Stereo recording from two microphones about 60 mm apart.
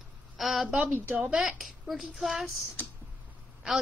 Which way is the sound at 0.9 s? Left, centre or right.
Right.